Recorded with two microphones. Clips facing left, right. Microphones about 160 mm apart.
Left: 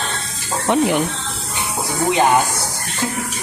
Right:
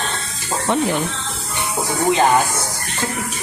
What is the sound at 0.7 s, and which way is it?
Speech, 15° left (ahead or behind).